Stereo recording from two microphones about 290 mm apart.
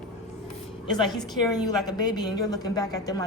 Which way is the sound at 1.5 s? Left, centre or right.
Centre.